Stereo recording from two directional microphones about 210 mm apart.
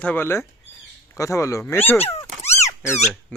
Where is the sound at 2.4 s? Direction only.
30° left (ahead or behind).